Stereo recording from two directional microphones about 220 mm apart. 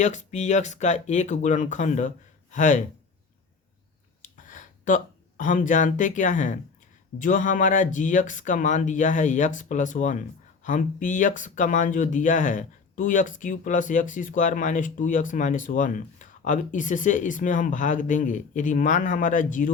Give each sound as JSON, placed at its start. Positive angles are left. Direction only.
{"t": 0.0, "sound": "speech", "side_deg": 35}
{"t": 4.2, "sound": "a sound", "side_deg": 35}
{"t": 7.2, "sound": "speech", "side_deg": 35}